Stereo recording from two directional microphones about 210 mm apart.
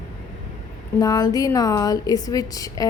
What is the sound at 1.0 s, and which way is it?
A woman's voice, 20° left (ahead or behind).